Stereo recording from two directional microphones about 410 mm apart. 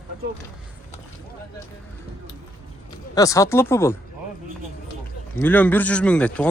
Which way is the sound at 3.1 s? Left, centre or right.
Centre.